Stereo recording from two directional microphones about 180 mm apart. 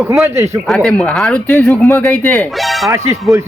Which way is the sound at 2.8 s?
15° right (ahead or behind).